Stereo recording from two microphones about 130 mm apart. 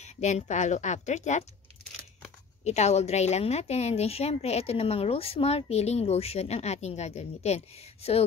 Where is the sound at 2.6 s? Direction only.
60° left (ahead or behind).